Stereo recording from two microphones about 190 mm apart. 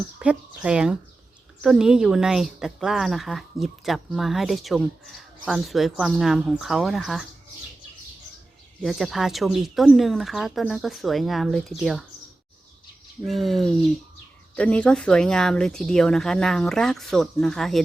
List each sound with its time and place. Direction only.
0.2 s a woman's voice: 5° right (ahead or behind)
8.8 s a woman's voice: centre (ahead or behind)
13.2 s a woman's voice: centre (ahead or behind)